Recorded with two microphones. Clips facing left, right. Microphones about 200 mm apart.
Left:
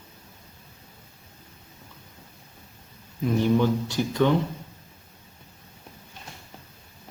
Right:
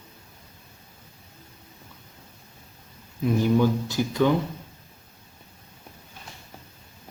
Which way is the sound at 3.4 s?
5° right (ahead or behind).